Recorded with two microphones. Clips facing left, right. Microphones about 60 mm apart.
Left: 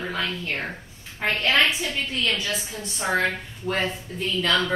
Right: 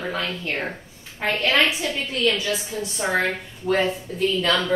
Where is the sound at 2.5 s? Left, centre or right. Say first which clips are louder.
Right 4 dB; centre.